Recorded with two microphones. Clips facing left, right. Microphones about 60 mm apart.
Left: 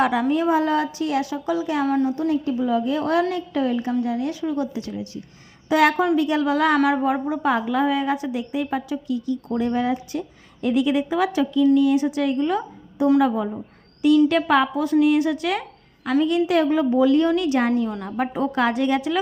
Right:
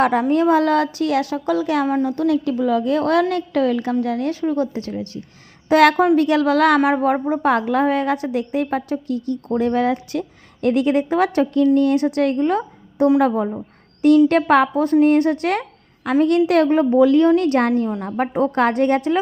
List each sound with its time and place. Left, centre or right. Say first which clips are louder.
0.0 s a woman's voice: right 3 dB; right
0.3 s a woman's voice: right 6 dB; right
5.6 s a woman's voice: right 5 dB; right
18.0 s a woman's voice: right 4 dB; right